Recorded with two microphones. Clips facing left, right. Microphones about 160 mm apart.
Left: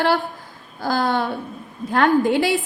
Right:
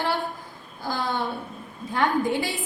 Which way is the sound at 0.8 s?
85° left.